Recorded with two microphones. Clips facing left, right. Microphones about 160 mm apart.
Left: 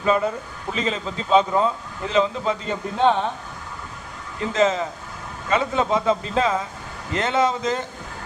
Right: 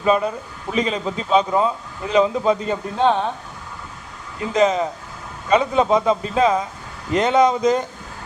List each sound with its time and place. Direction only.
0.0 s a man's voice: 20° right (ahead or behind)
4.4 s a man's voice: 15° right (ahead or behind)